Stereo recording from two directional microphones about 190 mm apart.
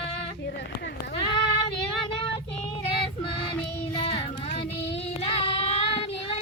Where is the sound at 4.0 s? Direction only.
30° left (ahead or behind).